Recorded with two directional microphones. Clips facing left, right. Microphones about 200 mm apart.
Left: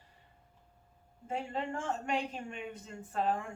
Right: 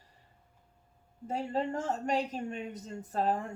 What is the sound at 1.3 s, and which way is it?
Speech, 40° right (ahead or behind).